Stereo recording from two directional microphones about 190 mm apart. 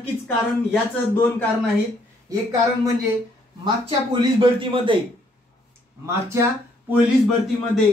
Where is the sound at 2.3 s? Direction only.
20° right (ahead or behind).